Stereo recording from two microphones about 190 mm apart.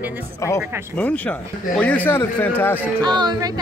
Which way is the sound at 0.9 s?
5° left (ahead or behind).